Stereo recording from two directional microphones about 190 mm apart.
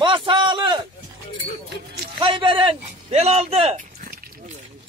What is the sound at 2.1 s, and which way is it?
Speech, 30° right (ahead or behind).